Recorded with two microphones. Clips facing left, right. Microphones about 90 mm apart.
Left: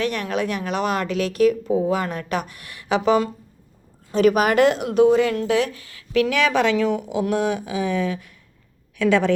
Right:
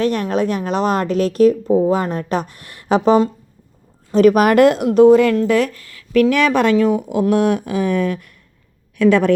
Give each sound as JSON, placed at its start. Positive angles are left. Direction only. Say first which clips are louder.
{"t": 0.0, "sound": "a woman's voice", "louder": "right 6 dB", "side_deg": -35}